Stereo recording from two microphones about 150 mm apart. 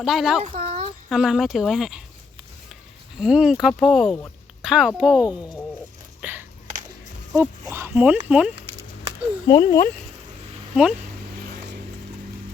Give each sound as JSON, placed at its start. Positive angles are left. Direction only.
{"t": 0.0, "sound": "speech", "side_deg": 0}
{"t": 0.5, "sound": "a sound", "side_deg": -60}
{"t": 1.1, "sound": "speech", "side_deg": -5}
{"t": 3.2, "sound": "speech", "side_deg": -5}
{"t": 6.2, "sound": "a sound", "side_deg": -10}
{"t": 7.3, "sound": "speech", "side_deg": -15}
{"t": 9.5, "sound": "speech", "side_deg": 30}
{"t": 11.3, "sound": "vehicle", "side_deg": -90}